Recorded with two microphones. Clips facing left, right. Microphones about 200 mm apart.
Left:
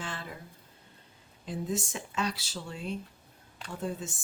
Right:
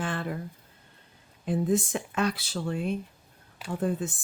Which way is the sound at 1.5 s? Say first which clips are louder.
Right 8 dB; 55° right (ahead or behind).